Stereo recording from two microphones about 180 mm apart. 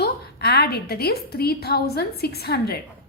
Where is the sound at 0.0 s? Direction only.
65° left (ahead or behind).